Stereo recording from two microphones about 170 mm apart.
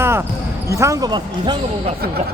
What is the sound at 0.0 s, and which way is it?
Basketball bounce, 15° right (ahead or behind).